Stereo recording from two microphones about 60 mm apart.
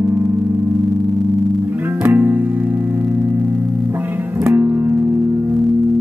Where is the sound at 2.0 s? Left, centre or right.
Right.